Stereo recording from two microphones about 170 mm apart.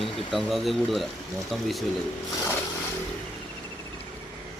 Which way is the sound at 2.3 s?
15° left (ahead or behind).